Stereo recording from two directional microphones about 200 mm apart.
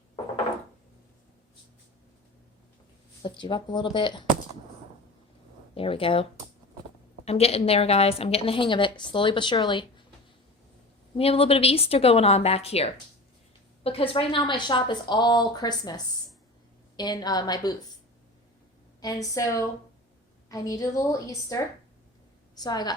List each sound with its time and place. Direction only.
3.2 s a woman's voice: 25° left (ahead or behind)
5.7 s a woman's voice: 25° left (ahead or behind)
7.3 s a woman's voice: 30° left (ahead or behind)
11.2 s a woman's voice: 30° left (ahead or behind)
17.0 s a woman's voice: 20° left (ahead or behind)
19.0 s a woman's voice: 15° left (ahead or behind)